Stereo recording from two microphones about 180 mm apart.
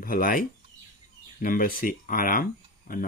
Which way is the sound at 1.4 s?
50° left (ahead or behind).